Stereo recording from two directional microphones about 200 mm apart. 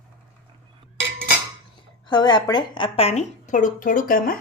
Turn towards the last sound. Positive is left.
turn(degrees=45)  # may be behind; listen again after turning